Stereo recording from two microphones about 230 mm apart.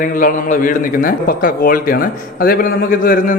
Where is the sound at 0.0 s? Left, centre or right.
Left.